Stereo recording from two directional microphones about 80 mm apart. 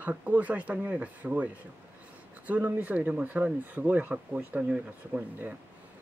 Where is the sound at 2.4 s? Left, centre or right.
Right.